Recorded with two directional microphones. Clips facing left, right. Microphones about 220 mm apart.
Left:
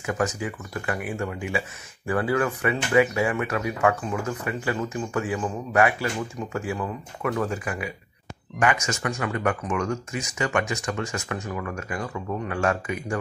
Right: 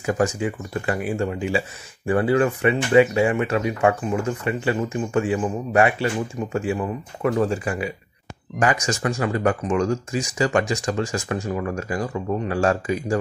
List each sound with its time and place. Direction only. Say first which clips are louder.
0.0 s speech: right 5 dB; 30° right (ahead or behind)